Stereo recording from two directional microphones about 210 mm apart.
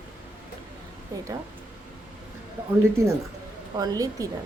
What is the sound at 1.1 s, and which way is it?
Speech, 15° right (ahead or behind).